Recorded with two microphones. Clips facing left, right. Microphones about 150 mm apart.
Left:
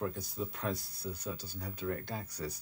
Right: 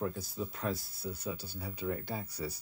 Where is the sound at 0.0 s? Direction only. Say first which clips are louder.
Right 1 dB; 5° right (ahead or behind).